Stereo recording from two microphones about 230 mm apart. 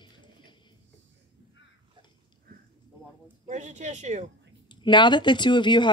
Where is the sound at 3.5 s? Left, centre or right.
Right.